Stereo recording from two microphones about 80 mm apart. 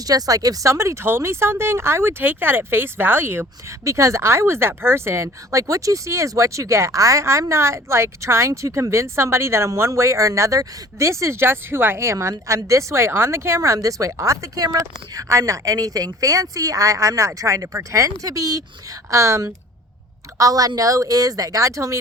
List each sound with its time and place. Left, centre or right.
0.0 s speech: right
3.8 s speech: right
12.3 s speech: right
20.4 s speech: right